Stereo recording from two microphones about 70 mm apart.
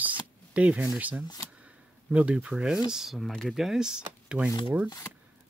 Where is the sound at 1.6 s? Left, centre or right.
Centre.